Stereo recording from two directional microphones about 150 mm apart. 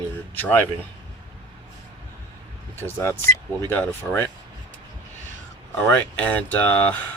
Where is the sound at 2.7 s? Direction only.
15° left (ahead or behind).